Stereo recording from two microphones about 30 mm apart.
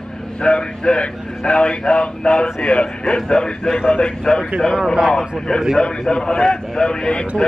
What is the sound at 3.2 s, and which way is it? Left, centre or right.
A man's voice, left.